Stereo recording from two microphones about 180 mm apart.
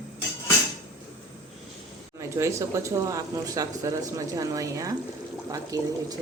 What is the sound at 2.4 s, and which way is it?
Speech, 15° right (ahead or behind).